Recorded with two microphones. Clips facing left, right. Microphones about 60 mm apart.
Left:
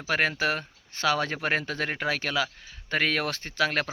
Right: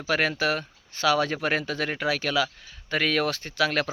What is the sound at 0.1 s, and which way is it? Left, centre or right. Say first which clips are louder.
Speech: right 1 dB; left.